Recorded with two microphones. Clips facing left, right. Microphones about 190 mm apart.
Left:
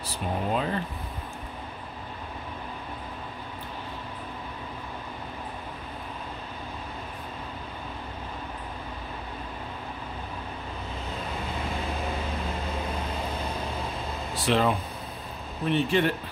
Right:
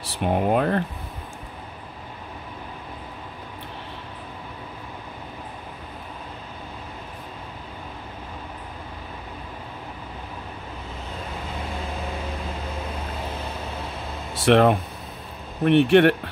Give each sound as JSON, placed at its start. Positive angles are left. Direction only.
{"t": 0.2, "sound": "speech", "side_deg": -60}
{"t": 14.4, "sound": "speech", "side_deg": -60}